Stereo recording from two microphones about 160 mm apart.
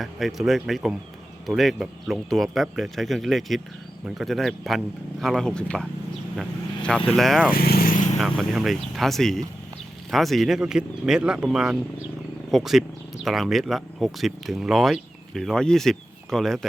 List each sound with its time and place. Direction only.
0.0 s speech: centre (ahead or behind)
6.3 s vehicle: centre (ahead or behind)
7.2 s speech: centre (ahead or behind)
7.5 s speech: 70° left (ahead or behind)
8.2 s speech: centre (ahead or behind)